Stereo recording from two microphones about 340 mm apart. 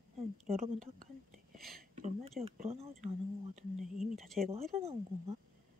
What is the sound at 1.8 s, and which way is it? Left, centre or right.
Speech, centre.